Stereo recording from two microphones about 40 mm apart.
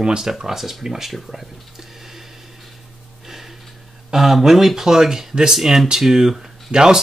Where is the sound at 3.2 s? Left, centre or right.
Centre.